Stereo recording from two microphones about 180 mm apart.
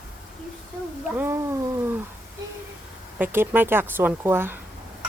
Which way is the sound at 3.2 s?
10° right (ahead or behind).